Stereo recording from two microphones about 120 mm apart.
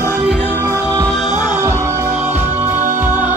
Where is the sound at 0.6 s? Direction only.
30° right (ahead or behind).